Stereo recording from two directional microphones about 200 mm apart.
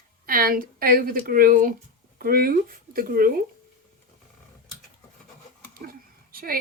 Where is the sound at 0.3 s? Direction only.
45° right (ahead or behind).